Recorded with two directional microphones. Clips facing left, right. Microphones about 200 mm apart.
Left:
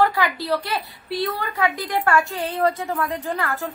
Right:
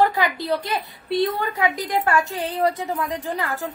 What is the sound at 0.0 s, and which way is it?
A woman's voice, 20° right (ahead or behind).